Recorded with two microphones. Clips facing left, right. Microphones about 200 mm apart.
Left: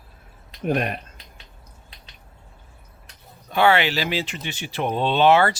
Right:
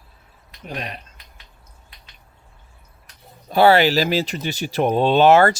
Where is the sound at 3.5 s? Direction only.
35° right (ahead or behind).